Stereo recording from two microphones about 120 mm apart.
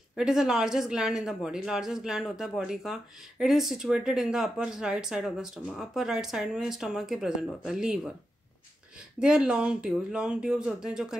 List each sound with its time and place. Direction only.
0.1 s speech: 5° right (ahead or behind)
9.2 s speech: 5° right (ahead or behind)